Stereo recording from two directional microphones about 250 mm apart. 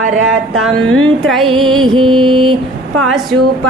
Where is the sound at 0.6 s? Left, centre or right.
Centre.